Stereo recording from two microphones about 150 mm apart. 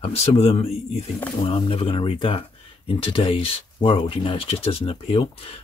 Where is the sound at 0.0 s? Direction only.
45° left (ahead or behind).